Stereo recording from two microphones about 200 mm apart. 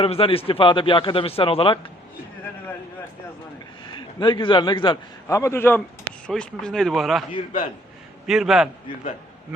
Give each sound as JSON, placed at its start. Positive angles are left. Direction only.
{"t": 0.0, "sound": "a man's voice", "side_deg": 30}
{"t": 3.9, "sound": "a man's voice", "side_deg": 20}
{"t": 8.3, "sound": "speech", "side_deg": 0}